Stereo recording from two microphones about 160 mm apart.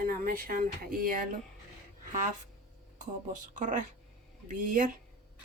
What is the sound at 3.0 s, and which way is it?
Speech, 55° right (ahead or behind).